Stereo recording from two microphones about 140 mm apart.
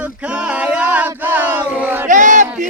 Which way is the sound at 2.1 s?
65° right (ahead or behind).